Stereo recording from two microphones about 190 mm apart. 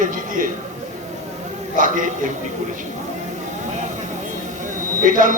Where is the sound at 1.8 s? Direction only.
45° right (ahead or behind).